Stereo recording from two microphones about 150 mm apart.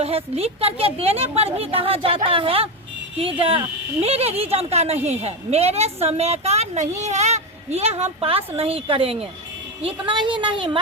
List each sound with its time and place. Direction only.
0.0 s a woman's voice: 40° right (ahead or behind)